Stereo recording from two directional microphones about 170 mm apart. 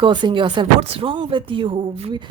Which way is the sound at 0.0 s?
30° right (ahead or behind).